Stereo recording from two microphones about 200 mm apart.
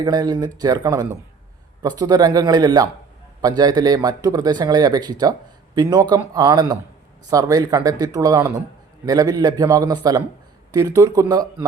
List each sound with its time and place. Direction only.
0.0 s speech: 20° right (ahead or behind)